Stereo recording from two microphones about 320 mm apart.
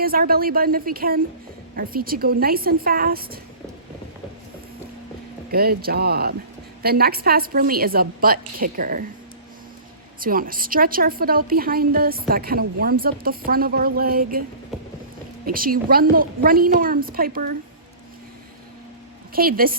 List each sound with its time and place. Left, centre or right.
0.0 s a woman's voice: right
5.5 s a woman's voice: right
10.2 s a woman's voice: right
15.4 s a woman's voice: right
19.3 s a woman's voice: right